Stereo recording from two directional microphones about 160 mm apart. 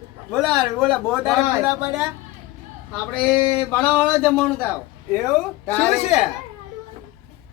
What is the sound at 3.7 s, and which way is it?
Speech, 10° left (ahead or behind).